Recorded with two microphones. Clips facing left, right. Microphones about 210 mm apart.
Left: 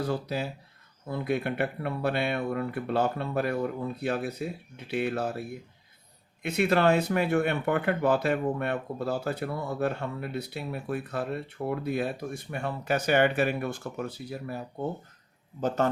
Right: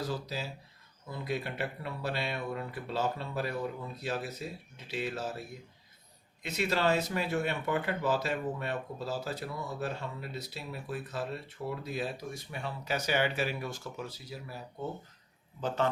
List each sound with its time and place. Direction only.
0.0 s speech: 60° left (ahead or behind)
15.6 s a man's voice: 45° left (ahead or behind)